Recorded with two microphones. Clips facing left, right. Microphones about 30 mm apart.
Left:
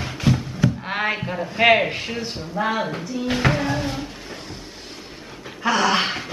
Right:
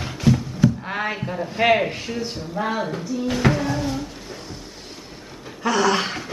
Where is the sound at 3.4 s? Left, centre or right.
Left.